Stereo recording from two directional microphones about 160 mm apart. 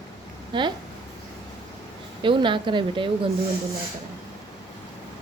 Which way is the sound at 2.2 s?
30° right (ahead or behind).